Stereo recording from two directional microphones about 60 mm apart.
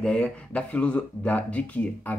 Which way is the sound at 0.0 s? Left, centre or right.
Left.